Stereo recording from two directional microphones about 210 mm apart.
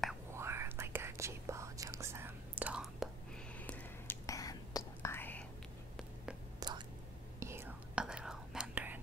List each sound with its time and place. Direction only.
0.3 s whispering: 10° right (ahead or behind)
3.6 s whispering: 10° left (ahead or behind)
6.6 s whispering: 20° right (ahead or behind)